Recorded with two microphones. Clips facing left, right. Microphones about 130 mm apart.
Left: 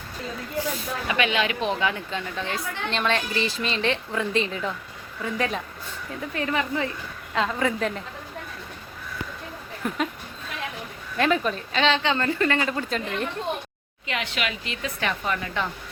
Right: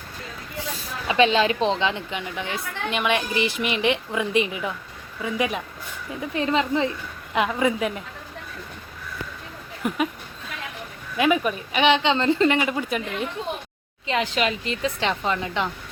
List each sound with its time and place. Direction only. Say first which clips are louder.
1.0 s a woman's voice: right 6 dB; 30° right (ahead or behind); by 8.0 s 10° right (ahead or behind)
9.8 s a woman's voice: right 3 dB; 15° right (ahead or behind)
11.2 s a woman's voice: right 2 dB; 10° right (ahead or behind)
14.1 s a woman's voice: right 6 dB; 35° right (ahead or behind)
15.0 s a woman's voice: right 1 dB; 25° right (ahead or behind)